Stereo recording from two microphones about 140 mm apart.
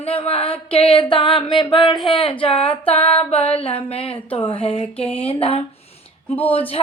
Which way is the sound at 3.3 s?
45° left (ahead or behind).